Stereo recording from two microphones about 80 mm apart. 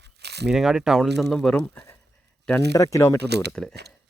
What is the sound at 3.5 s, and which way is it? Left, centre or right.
Speech, centre.